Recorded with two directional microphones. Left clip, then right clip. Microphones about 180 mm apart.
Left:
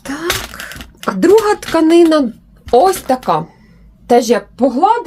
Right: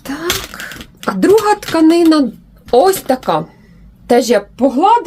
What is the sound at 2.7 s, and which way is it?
A woman's voice, 10° left (ahead or behind).